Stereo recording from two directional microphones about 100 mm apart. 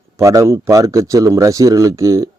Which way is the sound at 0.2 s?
30° right (ahead or behind).